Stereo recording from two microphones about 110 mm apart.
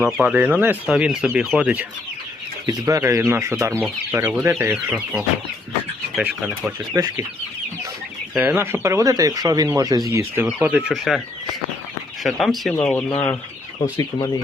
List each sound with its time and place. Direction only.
0.0 s speech: 10° right (ahead or behind)
2.6 s speech: 30° right (ahead or behind); by 5.2 s 10° right (ahead or behind)
6.2 s speech: 15° right (ahead or behind)
6.9 s speech: 35° right (ahead or behind)
8.4 s speech: 20° right (ahead or behind)
10.4 s speech: 15° right (ahead or behind)
10.9 s speech: centre (ahead or behind)
12.2 s speech: centre (ahead or behind)
13.1 s speech: 20° left (ahead or behind)
13.9 s speech: 40° left (ahead or behind)